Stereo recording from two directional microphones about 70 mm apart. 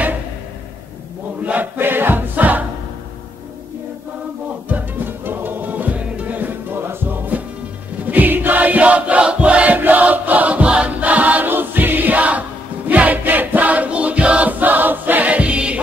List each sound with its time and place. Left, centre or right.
1.4 s music: right
4.6 s music: right
8.1 s choir: right